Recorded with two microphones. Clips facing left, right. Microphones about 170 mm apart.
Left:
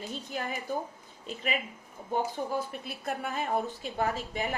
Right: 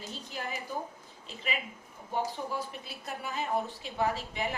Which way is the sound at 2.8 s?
50° left (ahead or behind).